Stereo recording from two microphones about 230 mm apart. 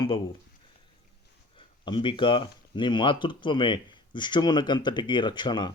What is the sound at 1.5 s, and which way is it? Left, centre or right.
Speech, left.